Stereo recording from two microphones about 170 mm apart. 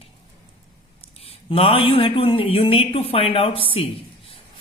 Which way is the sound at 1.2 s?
35° left (ahead or behind).